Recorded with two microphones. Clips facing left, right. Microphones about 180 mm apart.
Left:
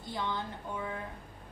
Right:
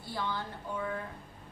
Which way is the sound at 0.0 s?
20° left (ahead or behind).